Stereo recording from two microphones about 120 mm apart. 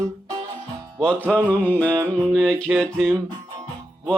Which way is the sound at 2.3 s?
5° left (ahead or behind).